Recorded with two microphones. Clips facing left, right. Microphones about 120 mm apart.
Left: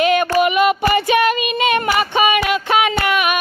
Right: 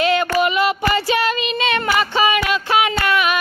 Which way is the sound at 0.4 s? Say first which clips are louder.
Left 3 dB; 20° left (ahead or behind).